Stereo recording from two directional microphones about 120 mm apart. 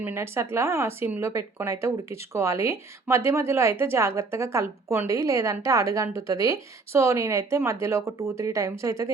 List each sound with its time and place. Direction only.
0.0 s a woman's voice: 20° right (ahead or behind)